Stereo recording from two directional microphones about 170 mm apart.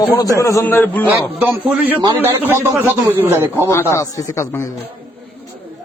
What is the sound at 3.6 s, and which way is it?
A man's voice, 15° left (ahead or behind).